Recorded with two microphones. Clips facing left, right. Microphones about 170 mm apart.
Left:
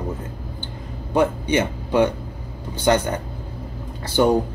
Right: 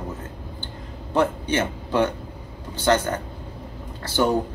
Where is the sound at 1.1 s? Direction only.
15° left (ahead or behind).